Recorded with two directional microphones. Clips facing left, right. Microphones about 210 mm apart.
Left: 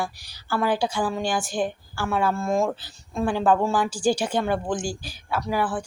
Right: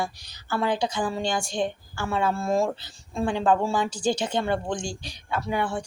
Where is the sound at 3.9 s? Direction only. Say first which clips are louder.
Left 2 dB; 10° left (ahead or behind).